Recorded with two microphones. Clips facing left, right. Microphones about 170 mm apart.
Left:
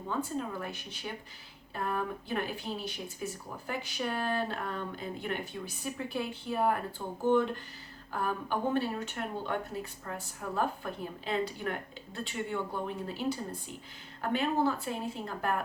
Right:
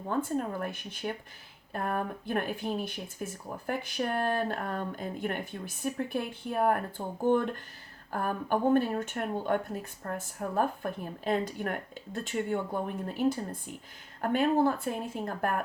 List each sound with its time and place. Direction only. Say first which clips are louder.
0.1 s speech: right 4 dB; 50° right (ahead or behind)